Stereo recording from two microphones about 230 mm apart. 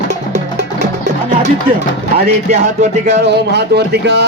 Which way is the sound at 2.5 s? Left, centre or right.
Right.